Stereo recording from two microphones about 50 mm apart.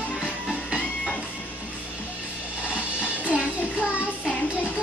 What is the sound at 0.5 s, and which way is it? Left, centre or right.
Music, centre.